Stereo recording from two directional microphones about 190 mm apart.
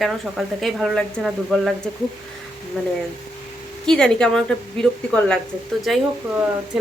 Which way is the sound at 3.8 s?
5° left (ahead or behind).